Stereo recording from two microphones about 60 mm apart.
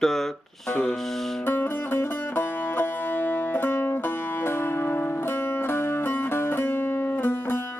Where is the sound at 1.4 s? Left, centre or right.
Left.